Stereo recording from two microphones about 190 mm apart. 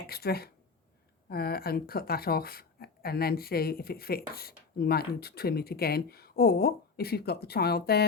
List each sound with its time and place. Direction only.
0.1 s speech: 55° left (ahead or behind)